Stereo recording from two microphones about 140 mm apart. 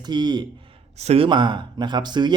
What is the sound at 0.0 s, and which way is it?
Speech, 30° right (ahead or behind).